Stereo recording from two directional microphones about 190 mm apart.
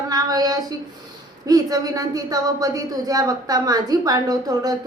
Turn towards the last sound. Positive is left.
turn(degrees=-20)  # may be behind; listen again after turning